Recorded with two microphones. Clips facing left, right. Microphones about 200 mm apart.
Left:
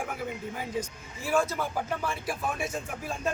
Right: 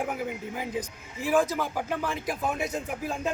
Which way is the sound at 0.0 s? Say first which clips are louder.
Right 3 dB; 20° right (ahead or behind).